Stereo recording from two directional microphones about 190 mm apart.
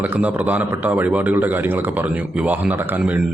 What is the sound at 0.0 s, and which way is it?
A man's voice, 10° right (ahead or behind).